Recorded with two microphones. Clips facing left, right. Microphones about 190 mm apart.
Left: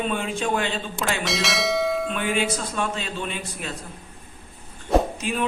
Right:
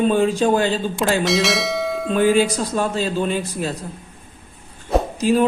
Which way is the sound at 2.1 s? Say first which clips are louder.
Right 9 dB; 35° right (ahead or behind).